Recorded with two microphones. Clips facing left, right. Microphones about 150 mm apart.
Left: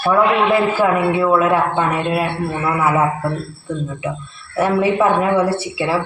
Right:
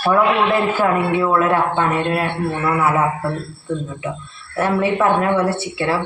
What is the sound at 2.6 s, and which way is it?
Speech, 5° left (ahead or behind).